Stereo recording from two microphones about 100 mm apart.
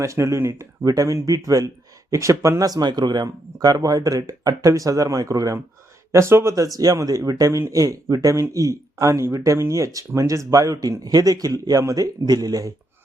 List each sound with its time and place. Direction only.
0.0 s speech: 30° right (ahead or behind)
0.9 s speech: 35° right (ahead or behind)